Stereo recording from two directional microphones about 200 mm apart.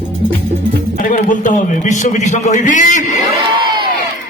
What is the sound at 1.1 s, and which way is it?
A man's voice, 40° left (ahead or behind).